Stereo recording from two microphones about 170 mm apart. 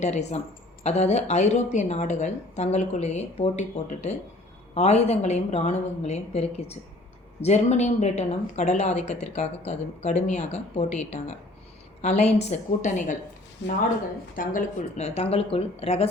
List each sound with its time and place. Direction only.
0.0 s a woman's voice: 40° left (ahead or behind)
13.6 s speech: 90° left
14.3 s a woman's voice: 50° left (ahead or behind)